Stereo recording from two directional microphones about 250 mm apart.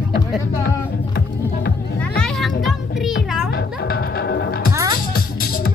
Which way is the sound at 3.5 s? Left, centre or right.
Left.